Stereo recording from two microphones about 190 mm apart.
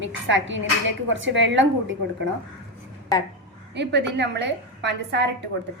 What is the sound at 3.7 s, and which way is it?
A woman's voice, 65° right (ahead or behind).